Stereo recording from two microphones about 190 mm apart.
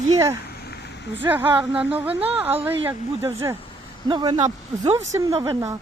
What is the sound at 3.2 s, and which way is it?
A woman's voice, 20° right (ahead or behind).